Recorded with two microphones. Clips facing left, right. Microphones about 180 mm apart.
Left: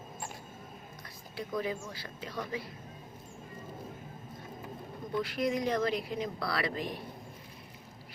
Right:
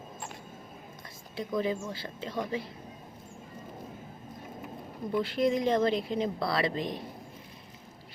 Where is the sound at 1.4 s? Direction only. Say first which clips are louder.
Right 4 dB; 25° right (ahead or behind).